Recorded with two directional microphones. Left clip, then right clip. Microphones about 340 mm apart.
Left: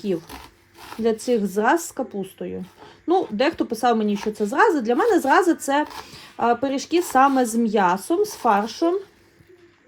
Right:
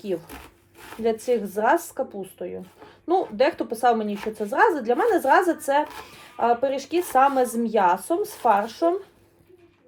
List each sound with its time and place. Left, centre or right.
1.0 s speech: centre
4.1 s speech: centre
4.5 s speech: centre